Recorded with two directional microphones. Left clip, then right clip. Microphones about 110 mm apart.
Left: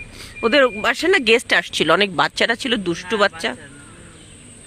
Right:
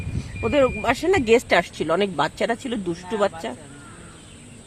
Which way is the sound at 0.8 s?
15° left (ahead or behind).